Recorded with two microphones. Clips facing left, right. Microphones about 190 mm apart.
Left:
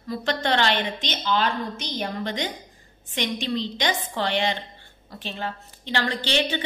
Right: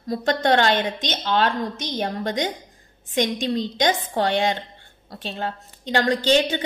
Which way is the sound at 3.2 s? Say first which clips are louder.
Right 4 dB; 45° right (ahead or behind).